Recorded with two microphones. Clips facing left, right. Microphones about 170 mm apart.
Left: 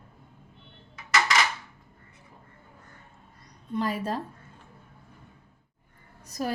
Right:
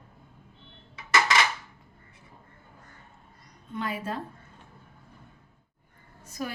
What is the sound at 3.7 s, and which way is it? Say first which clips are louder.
Speech: left 4 dB; 40° left (ahead or behind).